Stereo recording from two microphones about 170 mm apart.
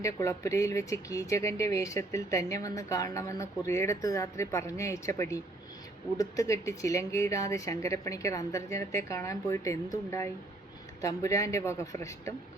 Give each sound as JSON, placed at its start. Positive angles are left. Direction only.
{"t": 0.0, "sound": "speech", "side_deg": 20}